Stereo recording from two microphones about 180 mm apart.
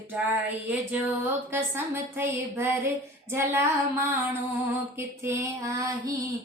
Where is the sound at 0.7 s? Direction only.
15° right (ahead or behind).